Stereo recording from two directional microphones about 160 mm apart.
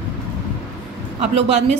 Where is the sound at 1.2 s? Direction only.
40° right (ahead or behind).